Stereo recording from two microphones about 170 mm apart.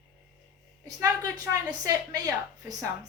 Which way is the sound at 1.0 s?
20° right (ahead or behind).